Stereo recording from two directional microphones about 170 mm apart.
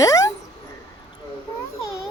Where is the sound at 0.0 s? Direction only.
20° left (ahead or behind).